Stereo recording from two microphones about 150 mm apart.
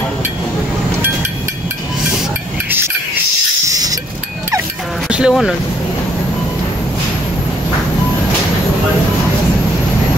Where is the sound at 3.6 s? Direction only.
25° right (ahead or behind).